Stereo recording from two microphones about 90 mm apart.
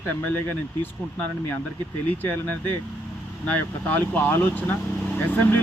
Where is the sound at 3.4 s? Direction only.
20° left (ahead or behind).